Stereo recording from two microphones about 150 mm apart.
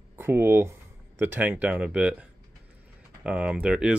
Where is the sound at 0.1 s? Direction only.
15° right (ahead or behind).